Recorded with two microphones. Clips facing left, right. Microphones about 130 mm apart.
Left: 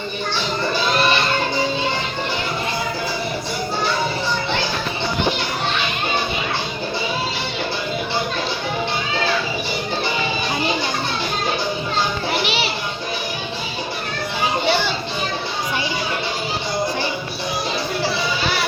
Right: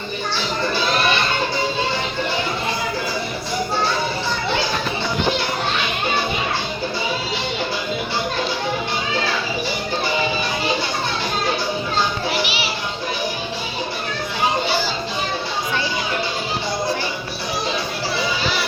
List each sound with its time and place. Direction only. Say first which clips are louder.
12.5 s children playing: left 3 dB; 60° left (ahead or behind)